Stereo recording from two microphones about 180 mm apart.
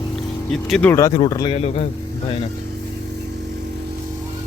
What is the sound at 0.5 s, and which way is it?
Speech, 5° left (ahead or behind).